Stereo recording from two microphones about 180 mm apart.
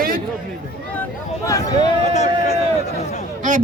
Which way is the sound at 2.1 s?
40° left (ahead or behind).